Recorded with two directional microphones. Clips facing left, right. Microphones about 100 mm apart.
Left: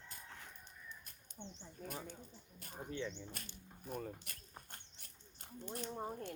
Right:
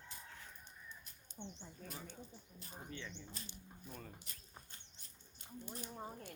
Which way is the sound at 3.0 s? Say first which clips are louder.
Left 11 dB; 15° left (ahead or behind).